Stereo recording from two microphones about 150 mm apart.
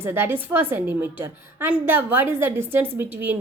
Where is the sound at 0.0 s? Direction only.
15° right (ahead or behind).